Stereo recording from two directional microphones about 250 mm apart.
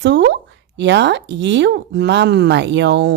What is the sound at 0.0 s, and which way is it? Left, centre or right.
Speech, right.